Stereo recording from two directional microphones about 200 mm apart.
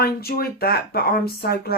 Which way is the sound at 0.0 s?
50° left (ahead or behind).